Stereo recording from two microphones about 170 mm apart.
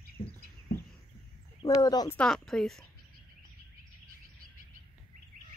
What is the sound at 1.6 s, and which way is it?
Speech, 20° left (ahead or behind).